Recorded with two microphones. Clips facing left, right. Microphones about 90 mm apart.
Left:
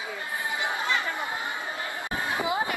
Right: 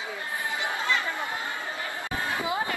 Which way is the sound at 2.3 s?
20° left (ahead or behind).